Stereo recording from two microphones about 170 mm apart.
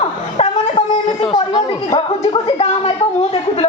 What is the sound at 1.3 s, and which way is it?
A woman's voice, 25° left (ahead or behind).